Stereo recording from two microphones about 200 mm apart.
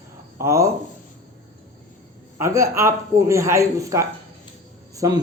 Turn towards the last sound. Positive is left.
turn(degrees=-20)  # may be behind; listen again after turning